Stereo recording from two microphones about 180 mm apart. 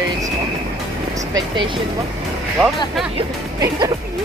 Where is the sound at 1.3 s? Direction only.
25° right (ahead or behind).